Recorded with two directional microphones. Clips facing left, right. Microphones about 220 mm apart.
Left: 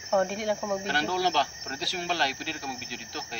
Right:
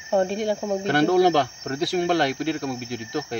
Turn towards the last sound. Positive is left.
turn(degrees=-55)  # may be behind; listen again after turning